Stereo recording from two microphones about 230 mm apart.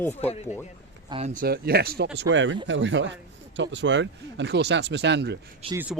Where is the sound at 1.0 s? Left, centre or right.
Right.